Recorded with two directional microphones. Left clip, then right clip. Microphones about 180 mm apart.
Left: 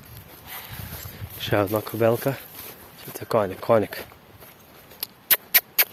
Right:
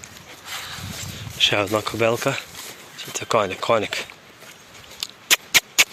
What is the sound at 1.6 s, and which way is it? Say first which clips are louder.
Speech: right 1 dB; 5° left (ahead or behind).